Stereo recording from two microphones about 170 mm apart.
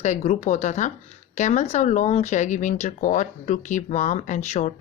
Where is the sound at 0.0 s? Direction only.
40° left (ahead or behind).